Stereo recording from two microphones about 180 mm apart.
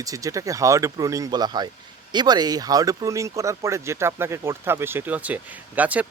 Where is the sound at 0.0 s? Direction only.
20° right (ahead or behind).